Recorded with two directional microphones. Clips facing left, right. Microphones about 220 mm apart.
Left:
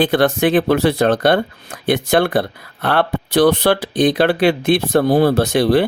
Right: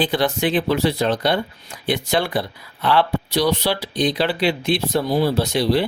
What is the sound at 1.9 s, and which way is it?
Speech, 55° left (ahead or behind).